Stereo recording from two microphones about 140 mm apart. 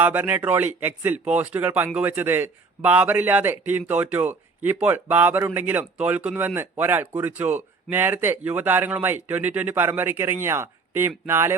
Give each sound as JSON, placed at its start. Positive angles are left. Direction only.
{"t": 0.0, "sound": "speech", "side_deg": -10}